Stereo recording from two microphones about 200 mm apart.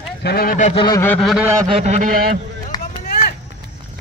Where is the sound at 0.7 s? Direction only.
25° left (ahead or behind).